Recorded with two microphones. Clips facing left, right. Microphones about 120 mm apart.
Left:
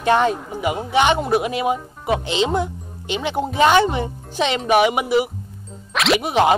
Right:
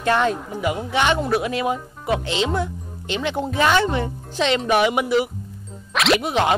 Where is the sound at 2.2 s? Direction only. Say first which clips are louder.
Left 2 dB; 20° left (ahead or behind).